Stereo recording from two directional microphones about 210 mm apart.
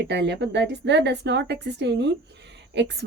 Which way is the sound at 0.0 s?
55° right (ahead or behind).